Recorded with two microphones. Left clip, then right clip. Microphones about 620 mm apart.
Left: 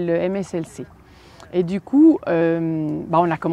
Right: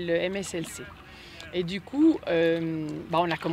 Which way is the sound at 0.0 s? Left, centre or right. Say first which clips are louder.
Left 6 dB; left.